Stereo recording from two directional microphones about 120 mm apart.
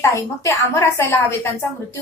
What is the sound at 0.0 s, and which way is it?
A woman's voice, 25° left (ahead or behind).